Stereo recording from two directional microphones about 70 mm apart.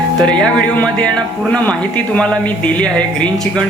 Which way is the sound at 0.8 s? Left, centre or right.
Centre.